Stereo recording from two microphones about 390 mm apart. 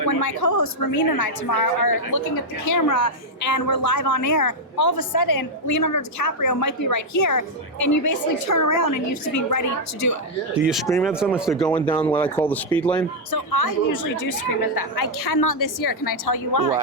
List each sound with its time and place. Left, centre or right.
0.0 s a woman's voice: left
10.7 s speech: centre
11.7 s speech: centre
13.3 s a woman's voice: left